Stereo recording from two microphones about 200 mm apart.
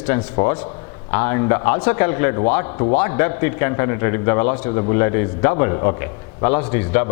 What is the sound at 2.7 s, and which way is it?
Speech, 30° left (ahead or behind).